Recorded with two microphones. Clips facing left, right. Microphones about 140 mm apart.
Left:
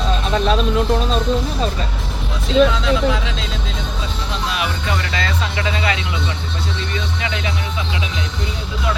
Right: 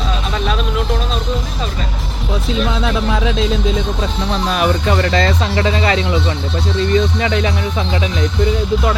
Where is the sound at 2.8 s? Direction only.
60° right (ahead or behind).